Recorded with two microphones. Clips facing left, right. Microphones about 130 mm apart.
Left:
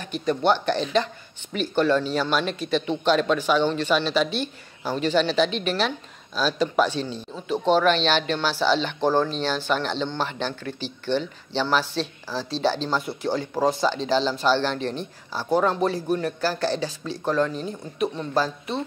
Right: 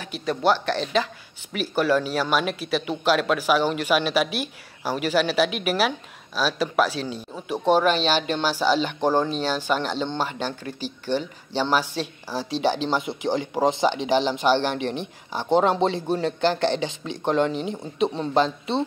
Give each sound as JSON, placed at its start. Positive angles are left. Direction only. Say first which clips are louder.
{"t": 0.0, "sound": "speech", "louder": "even", "side_deg": 0}